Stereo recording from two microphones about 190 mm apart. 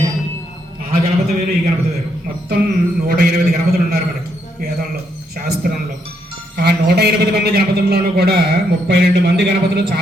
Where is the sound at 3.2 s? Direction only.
60° right (ahead or behind).